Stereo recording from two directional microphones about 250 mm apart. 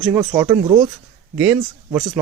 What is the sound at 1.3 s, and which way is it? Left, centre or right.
Speech, centre.